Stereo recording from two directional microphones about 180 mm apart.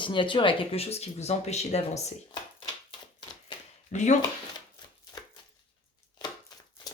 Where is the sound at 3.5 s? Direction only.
25° left (ahead or behind).